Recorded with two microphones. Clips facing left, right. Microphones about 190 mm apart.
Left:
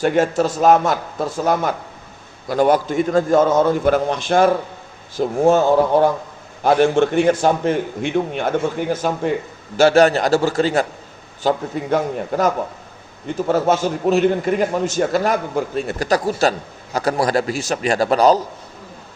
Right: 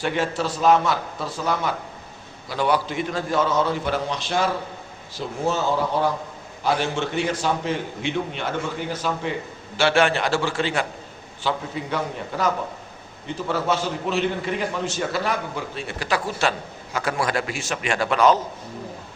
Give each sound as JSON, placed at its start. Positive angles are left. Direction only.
{"t": 0.0, "sound": "a man's voice", "side_deg": 45}